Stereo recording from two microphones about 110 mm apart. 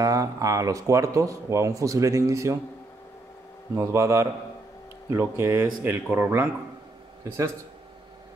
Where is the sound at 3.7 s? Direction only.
25° right (ahead or behind).